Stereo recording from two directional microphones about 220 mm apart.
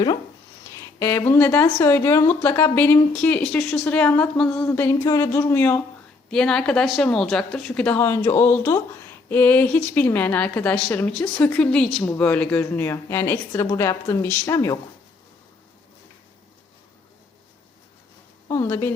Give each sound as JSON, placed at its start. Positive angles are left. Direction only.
{"t": 0.7, "sound": "speech", "side_deg": 15}
{"t": 18.4, "sound": "speech", "side_deg": 15}